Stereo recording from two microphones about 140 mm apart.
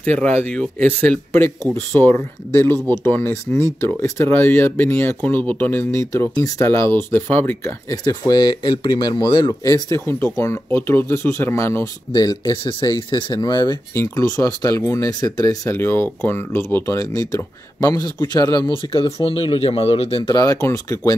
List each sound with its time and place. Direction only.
0.4 s speech: 10° left (ahead or behind)
1.6 s speech: 25° right (ahead or behind)
2.0 s speech: 15° left (ahead or behind)
7.9 s speech: 25° left (ahead or behind); by 20.3 s 45° left (ahead or behind)
20.3 s speech: 25° left (ahead or behind)